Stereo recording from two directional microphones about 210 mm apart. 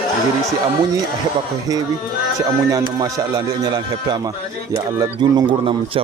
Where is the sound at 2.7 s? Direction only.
15° right (ahead or behind).